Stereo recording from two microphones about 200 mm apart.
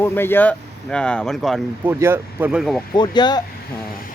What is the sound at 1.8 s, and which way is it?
Speech, 10° right (ahead or behind).